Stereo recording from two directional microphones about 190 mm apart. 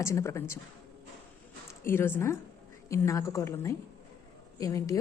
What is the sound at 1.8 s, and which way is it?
A woman's voice, 10° left (ahead or behind).